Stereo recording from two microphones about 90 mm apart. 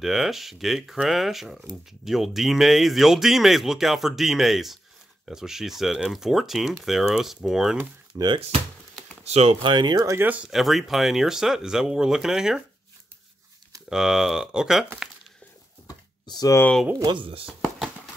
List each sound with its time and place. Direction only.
0.0 s speech: 5° right (ahead or behind)
8.1 s speech: 40° right (ahead or behind)
9.5 s speech: 65° right (ahead or behind)
9.9 s speech: 35° right (ahead or behind)
10.2 s speech: 15° right (ahead or behind)
10.5 s speech: centre (ahead or behind)
13.8 s speech: 5° right (ahead or behind)
16.3 s speech: 45° left (ahead or behind)
17.0 s speech: 65° right (ahead or behind)